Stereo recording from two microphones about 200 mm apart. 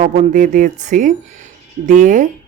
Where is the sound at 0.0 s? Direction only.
35° right (ahead or behind).